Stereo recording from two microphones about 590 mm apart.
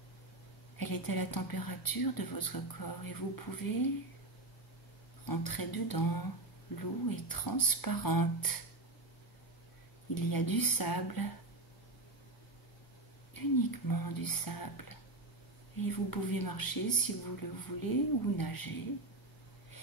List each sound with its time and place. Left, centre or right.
0.7 s speech: left
5.2 s speech: left
10.1 s speech: left
13.3 s speech: left